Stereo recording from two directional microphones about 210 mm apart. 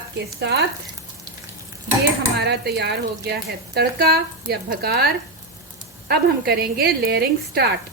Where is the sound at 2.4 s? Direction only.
50° right (ahead or behind).